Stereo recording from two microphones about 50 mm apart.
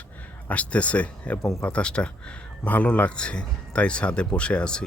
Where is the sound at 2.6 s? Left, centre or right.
Left.